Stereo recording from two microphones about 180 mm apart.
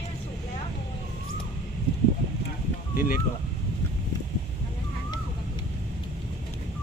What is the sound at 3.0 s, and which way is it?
Speech, 55° left (ahead or behind).